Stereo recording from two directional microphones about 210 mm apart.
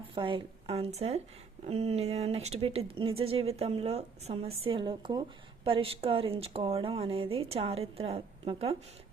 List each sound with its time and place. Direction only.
0.1 s speech: 25° right (ahead or behind)